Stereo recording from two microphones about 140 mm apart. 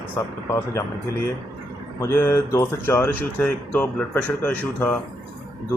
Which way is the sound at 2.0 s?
20° left (ahead or behind).